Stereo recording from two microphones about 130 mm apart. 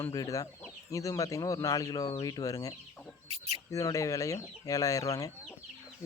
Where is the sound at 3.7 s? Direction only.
25° left (ahead or behind).